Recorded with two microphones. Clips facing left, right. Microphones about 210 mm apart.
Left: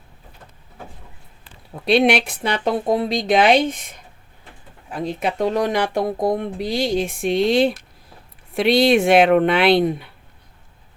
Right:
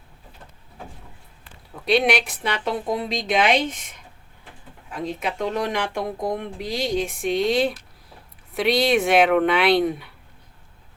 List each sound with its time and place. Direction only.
1.8 s speech: 30° left (ahead or behind)
4.9 s speech: 35° left (ahead or behind)